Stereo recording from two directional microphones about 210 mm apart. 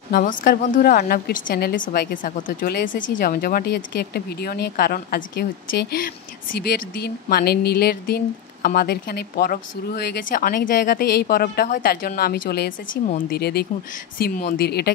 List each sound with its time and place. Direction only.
0.1 s speech: 40° left (ahead or behind)
13.4 s speech: 50° left (ahead or behind)